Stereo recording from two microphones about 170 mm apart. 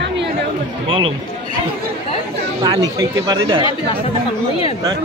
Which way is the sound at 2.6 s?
20° right (ahead or behind).